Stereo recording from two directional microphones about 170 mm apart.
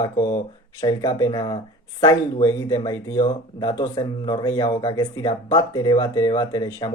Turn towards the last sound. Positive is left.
turn(degrees=20)  # may be behind; listen again after turning